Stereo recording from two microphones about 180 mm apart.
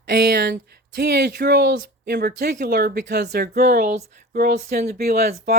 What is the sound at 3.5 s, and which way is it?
Speech, 40° right (ahead or behind).